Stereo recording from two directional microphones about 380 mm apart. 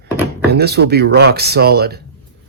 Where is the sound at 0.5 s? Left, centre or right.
Right.